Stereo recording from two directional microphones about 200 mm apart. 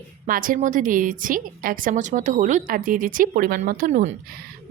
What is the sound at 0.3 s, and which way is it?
A woman's voice, 45° right (ahead or behind).